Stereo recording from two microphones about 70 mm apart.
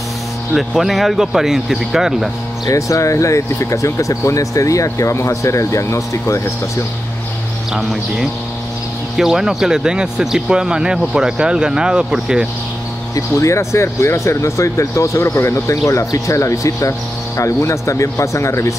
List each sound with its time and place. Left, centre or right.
0.6 s speech: centre
2.6 s speech: left
7.7 s speech: centre
13.1 s speech: left